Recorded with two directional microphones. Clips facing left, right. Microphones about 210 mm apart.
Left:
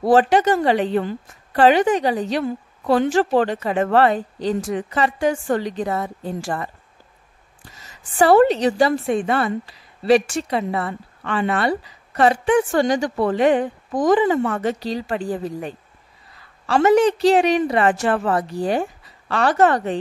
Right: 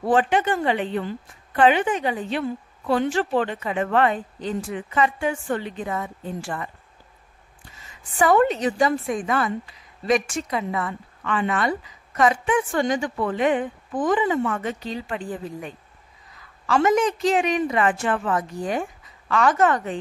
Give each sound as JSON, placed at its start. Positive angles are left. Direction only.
{"t": 0.0, "sound": "a woman's voice", "side_deg": 35}
{"t": 8.2, "sound": "a woman's voice", "side_deg": 35}